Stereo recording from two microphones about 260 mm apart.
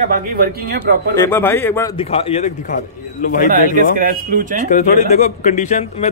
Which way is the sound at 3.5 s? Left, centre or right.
Right.